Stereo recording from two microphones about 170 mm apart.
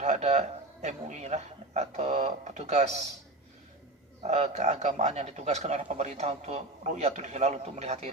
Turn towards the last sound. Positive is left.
turn(degrees=-40)  # may be behind; listen again after turning